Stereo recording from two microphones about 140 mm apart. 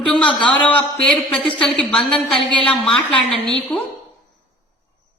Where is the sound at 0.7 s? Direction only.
5° left (ahead or behind).